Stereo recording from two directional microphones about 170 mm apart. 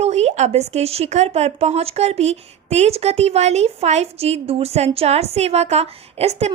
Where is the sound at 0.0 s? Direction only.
40° right (ahead or behind).